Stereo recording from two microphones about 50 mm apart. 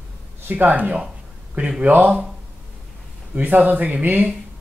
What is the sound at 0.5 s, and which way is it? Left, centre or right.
Speech, right.